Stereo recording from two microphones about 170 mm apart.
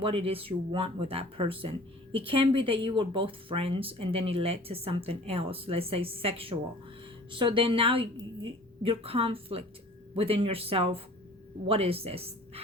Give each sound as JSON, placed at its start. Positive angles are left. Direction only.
{"t": 0.0, "sound": "a woman's voice", "side_deg": -35}